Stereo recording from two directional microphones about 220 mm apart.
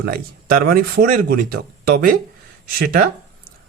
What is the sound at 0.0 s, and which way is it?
Speech, 40° right (ahead or behind).